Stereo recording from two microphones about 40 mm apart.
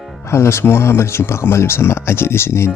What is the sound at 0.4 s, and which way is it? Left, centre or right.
Speech, left.